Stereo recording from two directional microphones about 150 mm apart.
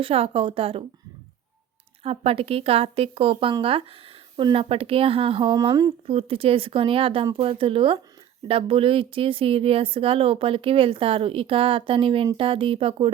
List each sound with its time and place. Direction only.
0.0 s speech: 40° right (ahead or behind)
2.0 s speech: 40° right (ahead or behind); by 5.9 s 25° right (ahead or behind)
6.1 s speech: 40° right (ahead or behind)